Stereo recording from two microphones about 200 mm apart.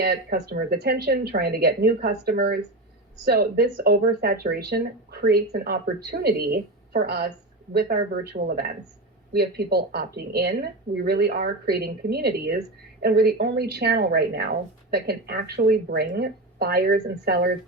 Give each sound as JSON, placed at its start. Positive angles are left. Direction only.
{"t": 0.0, "sound": "a woman's voice", "side_deg": -55}